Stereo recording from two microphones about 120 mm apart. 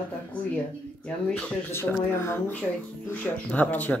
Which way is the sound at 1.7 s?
20° left (ahead or behind).